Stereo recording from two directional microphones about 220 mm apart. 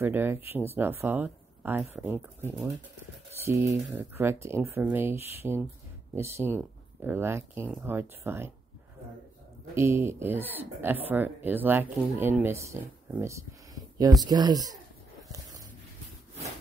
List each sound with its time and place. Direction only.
0.0 s speech: 10° right (ahead or behind)
5.4 s speech: 5° left (ahead or behind)
6.1 s speech: 10° right (ahead or behind)
9.8 s speech: 10° right (ahead or behind)